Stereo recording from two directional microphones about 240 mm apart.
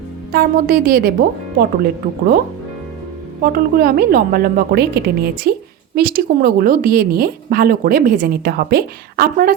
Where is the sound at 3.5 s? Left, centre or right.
Right.